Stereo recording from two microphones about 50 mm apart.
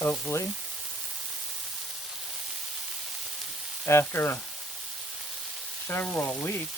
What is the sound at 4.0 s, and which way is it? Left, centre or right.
Speech, left.